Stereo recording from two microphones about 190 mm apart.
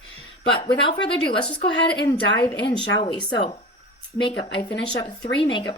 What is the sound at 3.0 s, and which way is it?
Speech, 25° left (ahead or behind).